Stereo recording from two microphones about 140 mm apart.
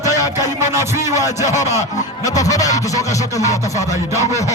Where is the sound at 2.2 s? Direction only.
25° left (ahead or behind).